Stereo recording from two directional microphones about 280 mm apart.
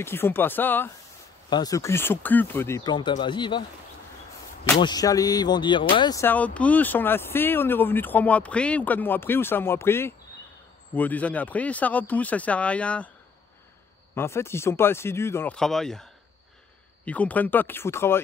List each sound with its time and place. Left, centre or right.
0.0 s speech: centre
4.6 s speech: centre
14.1 s speech: centre